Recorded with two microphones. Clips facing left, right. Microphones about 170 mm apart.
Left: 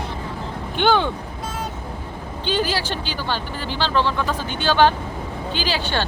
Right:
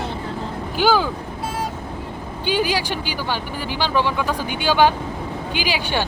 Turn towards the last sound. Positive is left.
turn(degrees=-10)  # may be behind; listen again after turning